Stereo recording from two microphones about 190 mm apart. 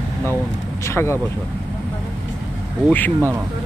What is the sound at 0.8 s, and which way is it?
Speech, 15° left (ahead or behind).